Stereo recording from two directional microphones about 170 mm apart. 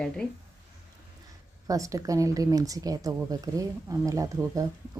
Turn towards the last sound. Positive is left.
turn(degrees=-20)  # may be behind; listen again after turning